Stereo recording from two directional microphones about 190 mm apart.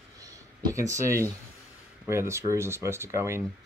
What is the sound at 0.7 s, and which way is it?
Speech, 15° right (ahead or behind).